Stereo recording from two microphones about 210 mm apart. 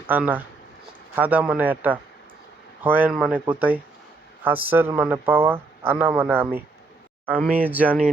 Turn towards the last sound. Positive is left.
turn(degrees=-10)  # may be behind; listen again after turning